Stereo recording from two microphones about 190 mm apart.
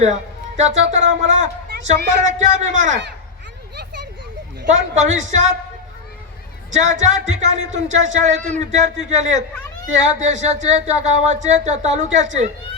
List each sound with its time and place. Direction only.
0.0 s speech: 35° right (ahead or behind)
4.7 s speech: 40° right (ahead or behind)
6.7 s speech: 40° right (ahead or behind)